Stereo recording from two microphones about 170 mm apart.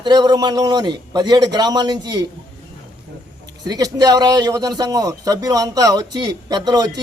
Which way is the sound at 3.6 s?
25° right (ahead or behind).